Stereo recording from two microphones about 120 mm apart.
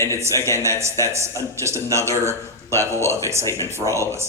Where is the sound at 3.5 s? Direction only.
25° left (ahead or behind).